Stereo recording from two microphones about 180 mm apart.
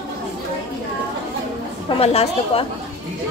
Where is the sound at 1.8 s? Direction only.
35° left (ahead or behind).